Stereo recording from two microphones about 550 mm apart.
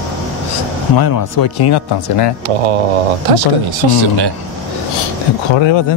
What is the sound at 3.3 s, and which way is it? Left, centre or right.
Speech, right.